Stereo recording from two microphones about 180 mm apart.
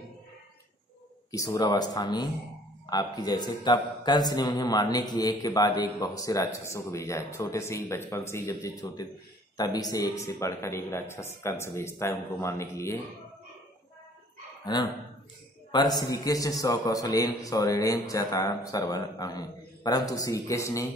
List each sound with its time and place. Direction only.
1.3 s a man's voice: 20° left (ahead or behind)
14.6 s a man's voice: 25° left (ahead or behind)